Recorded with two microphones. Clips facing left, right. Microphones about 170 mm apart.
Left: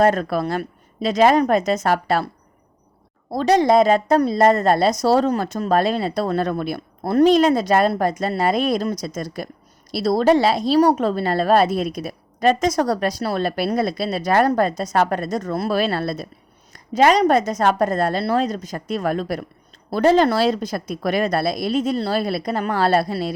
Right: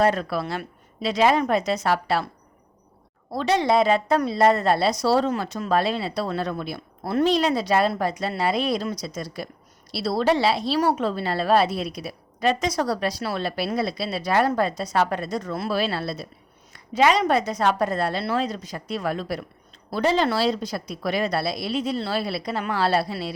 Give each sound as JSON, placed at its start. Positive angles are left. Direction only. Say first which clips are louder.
{"t": 0.0, "sound": "a woman's voice", "louder": "left 4 dB", "side_deg": 45}
{"t": 3.3, "sound": "a woman's voice", "louder": "left 5 dB", "side_deg": 40}